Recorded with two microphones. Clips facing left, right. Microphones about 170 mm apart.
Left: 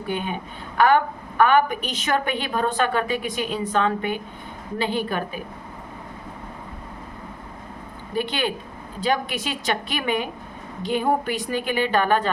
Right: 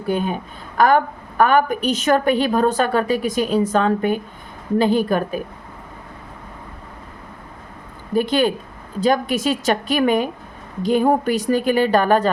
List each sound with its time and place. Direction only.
0.1 s a woman's voice: 40° right (ahead or behind)
8.1 s a woman's voice: 40° right (ahead or behind)